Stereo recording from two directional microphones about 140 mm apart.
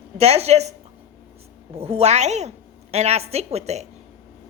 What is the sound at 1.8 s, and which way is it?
A woman's voice, 45° right (ahead or behind).